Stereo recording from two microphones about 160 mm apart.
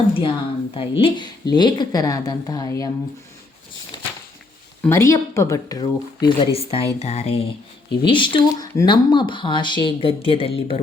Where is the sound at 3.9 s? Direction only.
30° left (ahead or behind).